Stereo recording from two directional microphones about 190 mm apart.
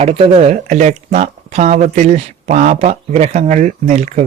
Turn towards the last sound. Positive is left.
turn(degrees=-35)  # may be behind; listen again after turning